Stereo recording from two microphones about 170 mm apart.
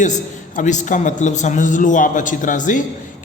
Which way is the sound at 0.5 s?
45° left (ahead or behind).